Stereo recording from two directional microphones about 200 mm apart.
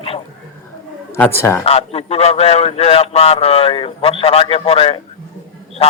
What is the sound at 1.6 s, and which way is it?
A man's voice, 30° left (ahead or behind).